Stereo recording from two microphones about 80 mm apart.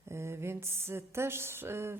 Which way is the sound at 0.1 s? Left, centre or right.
Right.